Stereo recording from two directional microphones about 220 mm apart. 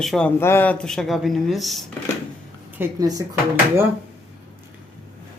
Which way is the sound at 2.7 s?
15° right (ahead or behind).